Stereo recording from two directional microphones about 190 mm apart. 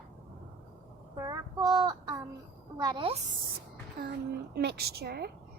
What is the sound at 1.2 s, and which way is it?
Child singing, 20° right (ahead or behind).